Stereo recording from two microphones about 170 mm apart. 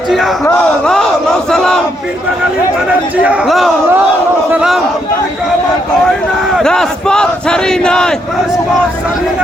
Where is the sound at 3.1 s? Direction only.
10° right (ahead or behind).